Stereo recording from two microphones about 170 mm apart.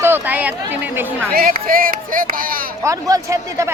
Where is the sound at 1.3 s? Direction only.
60° right (ahead or behind).